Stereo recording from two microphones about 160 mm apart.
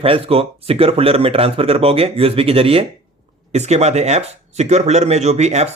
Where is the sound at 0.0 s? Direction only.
35° right (ahead or behind).